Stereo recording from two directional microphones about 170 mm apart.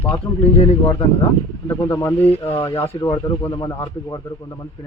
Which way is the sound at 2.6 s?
30° left (ahead or behind).